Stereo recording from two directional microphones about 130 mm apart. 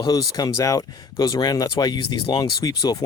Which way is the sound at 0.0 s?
30° left (ahead or behind).